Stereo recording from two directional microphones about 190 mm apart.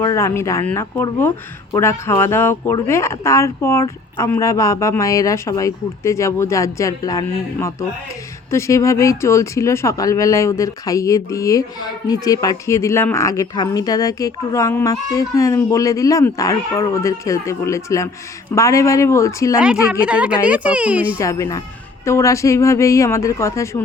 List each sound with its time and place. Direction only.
0.0 s speech: 15° left (ahead or behind)
19.5 s a woman's voice: 5° right (ahead or behind)
21.2 s speech: 15° left (ahead or behind)